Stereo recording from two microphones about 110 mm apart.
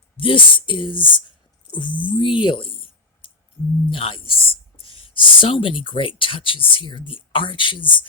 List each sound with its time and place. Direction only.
0.2 s speech: 50° left (ahead or behind)
3.2 s a sound: 55° left (ahead or behind)
3.8 s speech: 55° left (ahead or behind)